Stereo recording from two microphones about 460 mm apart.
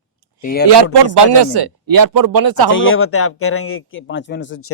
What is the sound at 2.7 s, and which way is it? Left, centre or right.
A man's voice, left.